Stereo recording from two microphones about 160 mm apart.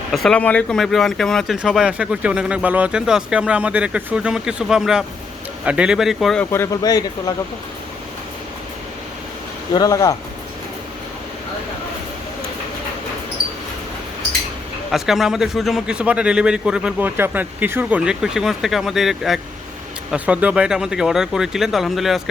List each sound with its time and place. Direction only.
0.1 s speech: 5° left (ahead or behind)
6.5 s speech: 20° left (ahead or behind)
9.7 s speech: 20° left (ahead or behind)
14.8 s speech: centre (ahead or behind)